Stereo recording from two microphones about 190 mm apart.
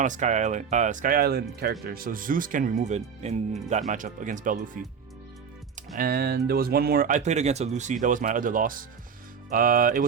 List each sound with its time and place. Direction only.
0.0 s speech: 40° right (ahead or behind)